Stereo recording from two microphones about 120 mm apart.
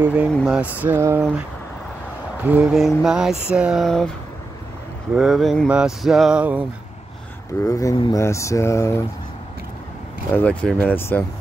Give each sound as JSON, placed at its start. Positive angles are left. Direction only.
{"t": 0.0, "sound": "speech", "side_deg": -10}
{"t": 2.4, "sound": "speech", "side_deg": -10}
{"t": 2.7, "sound": "mantra", "side_deg": 0}
{"t": 3.4, "sound": "speech", "side_deg": -10}
{"t": 3.8, "sound": "mantra", "side_deg": 5}
{"t": 5.1, "sound": "mantra", "side_deg": -5}
{"t": 5.7, "sound": "speech", "side_deg": -5}
{"t": 7.6, "sound": "speech", "side_deg": 30}
{"t": 10.3, "sound": "speech", "side_deg": 10}